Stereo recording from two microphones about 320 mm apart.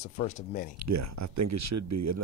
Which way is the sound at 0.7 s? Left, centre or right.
Right.